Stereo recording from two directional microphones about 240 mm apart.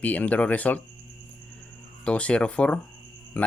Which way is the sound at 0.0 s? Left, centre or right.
Centre.